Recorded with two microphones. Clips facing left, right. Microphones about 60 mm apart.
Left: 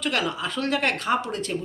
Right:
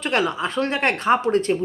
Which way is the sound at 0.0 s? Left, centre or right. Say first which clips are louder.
Right 4 dB; right.